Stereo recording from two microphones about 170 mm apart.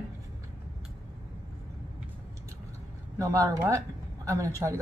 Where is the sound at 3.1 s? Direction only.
20° right (ahead or behind).